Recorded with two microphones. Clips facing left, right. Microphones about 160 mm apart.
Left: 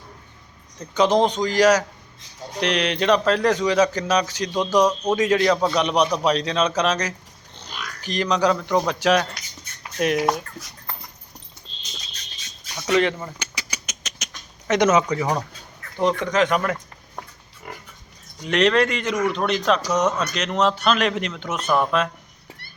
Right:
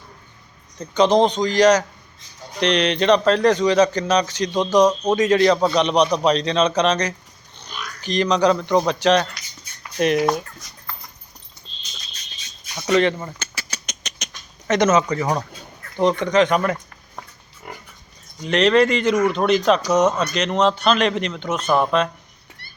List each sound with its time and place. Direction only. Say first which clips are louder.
0.9 s a man's voice: right 2 dB; 5° left (ahead or behind)
7.6 s a sound: right 1 dB; 90° left
8.0 s a man's voice: right 3 dB; 5° left (ahead or behind)
12.9 s a man's voice: right 2 dB; 5° left (ahead or behind)
13.4 s rodents: even; 15° left (ahead or behind)
14.7 s a man's voice: right 1 dB; 10° left (ahead or behind)
18.4 s a man's voice: right 3 dB; centre (ahead or behind)